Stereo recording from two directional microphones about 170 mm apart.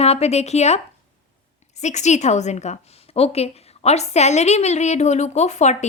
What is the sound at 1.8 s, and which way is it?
A woman's voice, 45° left (ahead or behind).